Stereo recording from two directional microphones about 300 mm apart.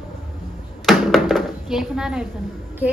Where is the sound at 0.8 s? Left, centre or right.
Centre.